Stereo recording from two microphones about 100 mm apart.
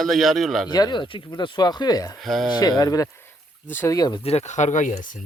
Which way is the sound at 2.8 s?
35° left (ahead or behind).